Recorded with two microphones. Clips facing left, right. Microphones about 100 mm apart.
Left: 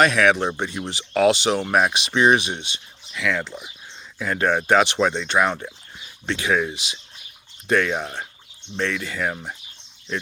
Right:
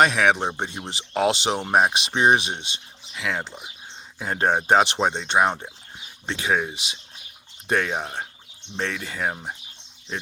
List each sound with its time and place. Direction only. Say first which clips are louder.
0.0 s speech: left 1 dB; 25° right (ahead or behind)